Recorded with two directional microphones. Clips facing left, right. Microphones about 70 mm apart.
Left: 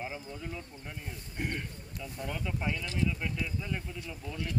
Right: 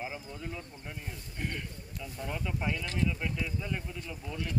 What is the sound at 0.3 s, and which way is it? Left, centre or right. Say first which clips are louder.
Speech: even; centre.